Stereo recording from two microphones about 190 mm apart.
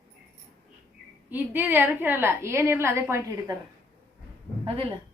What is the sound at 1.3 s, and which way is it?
A woman's voice, 10° right (ahead or behind).